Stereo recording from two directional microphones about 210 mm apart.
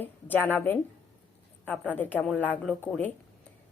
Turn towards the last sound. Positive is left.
turn(degrees=5)  # may be behind; listen again after turning